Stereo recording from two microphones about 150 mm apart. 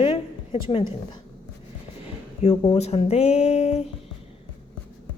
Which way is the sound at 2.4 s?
40° left (ahead or behind).